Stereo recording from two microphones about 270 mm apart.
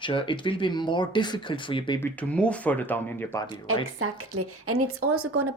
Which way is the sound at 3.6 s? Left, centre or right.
Right.